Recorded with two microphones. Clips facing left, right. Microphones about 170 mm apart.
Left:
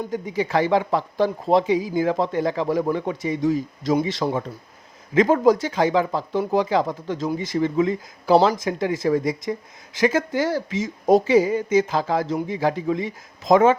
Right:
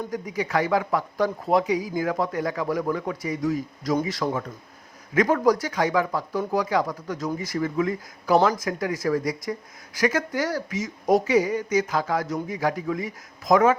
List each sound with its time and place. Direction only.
0.1 s speech: 25° left (ahead or behind)